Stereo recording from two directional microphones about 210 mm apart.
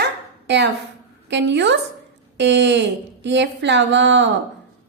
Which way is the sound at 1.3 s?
55° right (ahead or behind).